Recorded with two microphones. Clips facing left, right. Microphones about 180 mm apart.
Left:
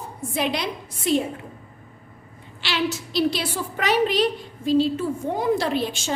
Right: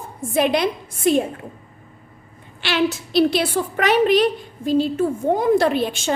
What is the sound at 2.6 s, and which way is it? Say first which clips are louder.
A woman's voice: right 5 dB; 55° right (ahead or behind).